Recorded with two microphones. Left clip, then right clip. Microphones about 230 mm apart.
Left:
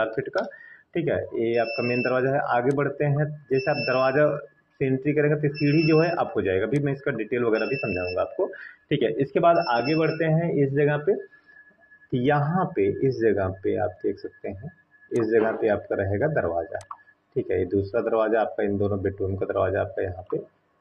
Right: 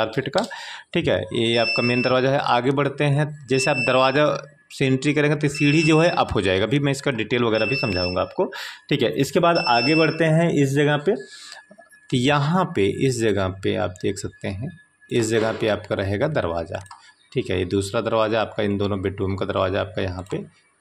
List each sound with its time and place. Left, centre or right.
0.0 s speech: right
12.1 s speech: right